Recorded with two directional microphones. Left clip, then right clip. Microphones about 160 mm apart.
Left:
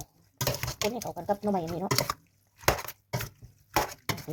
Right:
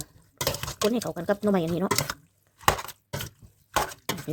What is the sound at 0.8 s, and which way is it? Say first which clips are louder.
Speech: right 5 dB; 35° right (ahead or behind).